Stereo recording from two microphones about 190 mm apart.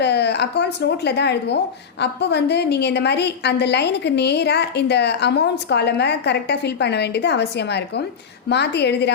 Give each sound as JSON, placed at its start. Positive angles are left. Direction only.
{"t": 0.0, "sound": "speech", "side_deg": 60}